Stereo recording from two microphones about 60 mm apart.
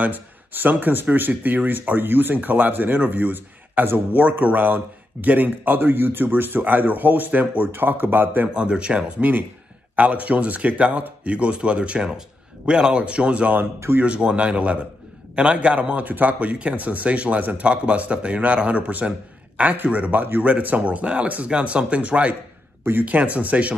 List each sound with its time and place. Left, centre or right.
0.0 s speech: right
8.5 s a man's voice: centre
13.7 s speech: right
14.0 s a man's voice: centre